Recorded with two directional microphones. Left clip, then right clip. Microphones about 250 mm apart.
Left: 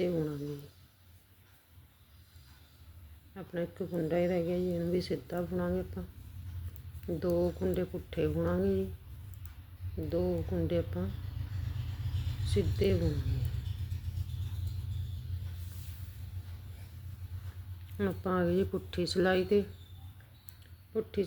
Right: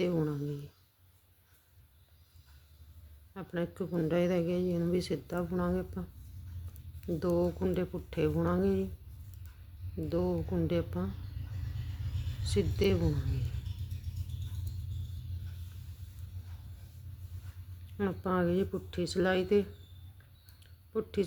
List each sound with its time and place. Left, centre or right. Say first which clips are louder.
0.0 s a sound: right 1 dB; centre
3.3 s speech: even; centre
7.2 s speech: even; centre
10.1 s speech: even; centre
12.5 s speech: right 1 dB; centre
17.9 s speech: even; centre
20.9 s speech: even; centre